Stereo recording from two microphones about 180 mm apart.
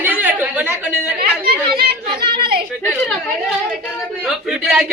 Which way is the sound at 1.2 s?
55° right (ahead or behind).